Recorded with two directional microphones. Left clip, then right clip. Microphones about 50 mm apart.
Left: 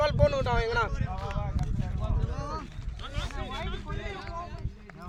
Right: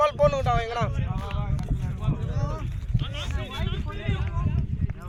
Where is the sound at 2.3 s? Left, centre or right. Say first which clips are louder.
Right 2 dB; left.